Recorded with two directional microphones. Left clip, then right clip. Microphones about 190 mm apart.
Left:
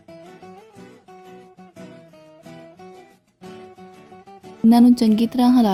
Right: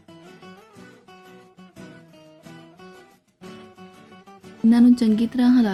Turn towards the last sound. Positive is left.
turn(degrees=30)  # may be behind; listen again after turning